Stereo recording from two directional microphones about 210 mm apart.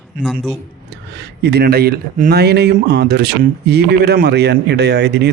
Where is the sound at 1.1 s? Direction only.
55° right (ahead or behind).